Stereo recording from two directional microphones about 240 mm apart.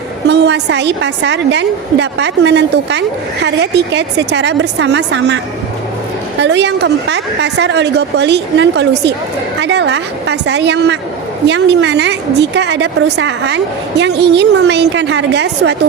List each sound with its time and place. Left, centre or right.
0.3 s a woman's voice: right
6.4 s a woman's voice: right